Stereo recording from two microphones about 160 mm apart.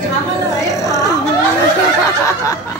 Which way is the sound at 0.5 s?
20° left (ahead or behind).